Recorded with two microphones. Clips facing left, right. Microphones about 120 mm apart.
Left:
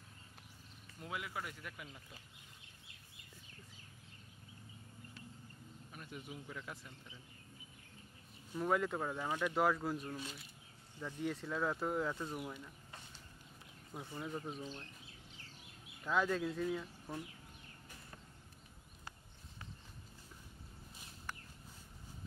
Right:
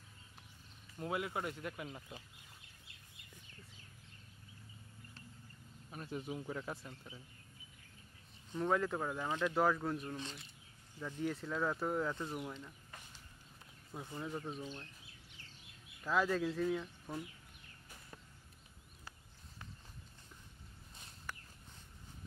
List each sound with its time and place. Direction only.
0.9 s speech: 35° right (ahead or behind)
5.9 s speech: 35° right (ahead or behind)
8.5 s speech: 5° left (ahead or behind)
13.9 s speech: centre (ahead or behind)
16.1 s speech: centre (ahead or behind)